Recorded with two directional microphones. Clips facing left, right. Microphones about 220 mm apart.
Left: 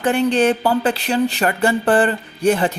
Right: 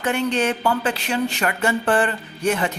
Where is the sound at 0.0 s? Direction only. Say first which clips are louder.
Left 5 dB; 35° left (ahead or behind).